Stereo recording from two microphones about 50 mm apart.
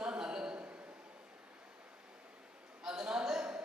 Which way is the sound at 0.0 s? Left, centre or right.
Centre.